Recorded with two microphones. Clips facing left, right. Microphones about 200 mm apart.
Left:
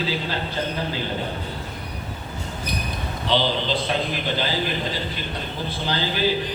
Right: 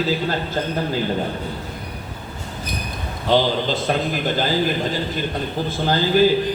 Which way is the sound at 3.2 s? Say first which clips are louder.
Right 4 dB; 45° right (ahead or behind).